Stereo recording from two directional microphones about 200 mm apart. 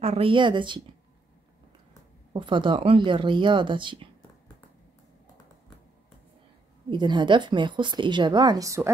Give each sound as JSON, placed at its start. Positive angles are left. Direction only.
{"t": 0.0, "sound": "a woman's voice", "side_deg": -30}
{"t": 2.3, "sound": "a woman's voice", "side_deg": -25}
{"t": 6.9, "sound": "a woman's voice", "side_deg": -25}